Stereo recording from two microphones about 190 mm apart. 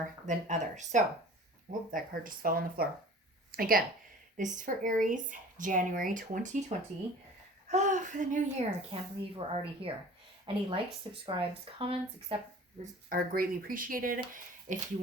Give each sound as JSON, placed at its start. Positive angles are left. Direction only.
{"t": 0.3, "sound": "a woman's voice", "side_deg": -40}
{"t": 12.8, "sound": "speech", "side_deg": -50}